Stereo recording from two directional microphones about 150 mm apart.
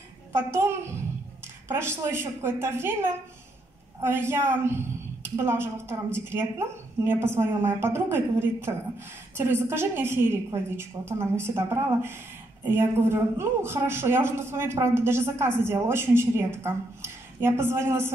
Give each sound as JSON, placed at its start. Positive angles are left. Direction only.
{"t": 0.3, "sound": "a woman's voice", "side_deg": -15}